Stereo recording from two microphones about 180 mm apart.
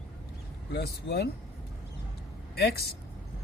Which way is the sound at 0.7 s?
65° left (ahead or behind).